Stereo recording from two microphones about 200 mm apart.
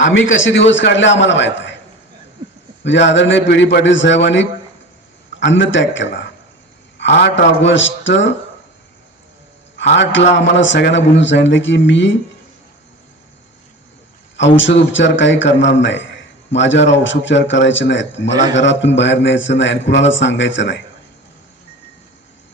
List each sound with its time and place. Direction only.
0.0 s a man's voice: 70° left (ahead or behind)
2.8 s a man's voice: 60° left (ahead or behind)
9.7 s a man's voice: 60° left (ahead or behind)
14.3 s a man's voice: 65° left (ahead or behind)